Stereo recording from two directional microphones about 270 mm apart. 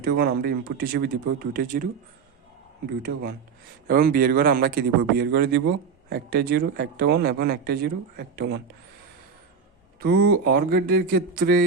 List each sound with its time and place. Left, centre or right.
0.0 s speech: right
10.0 s speech: right